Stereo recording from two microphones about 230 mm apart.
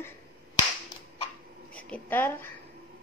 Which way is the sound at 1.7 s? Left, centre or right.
Centre.